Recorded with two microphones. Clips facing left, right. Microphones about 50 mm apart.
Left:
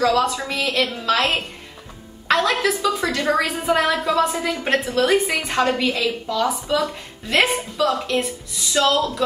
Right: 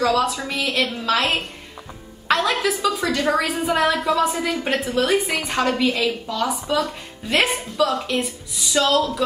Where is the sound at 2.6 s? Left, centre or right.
Centre.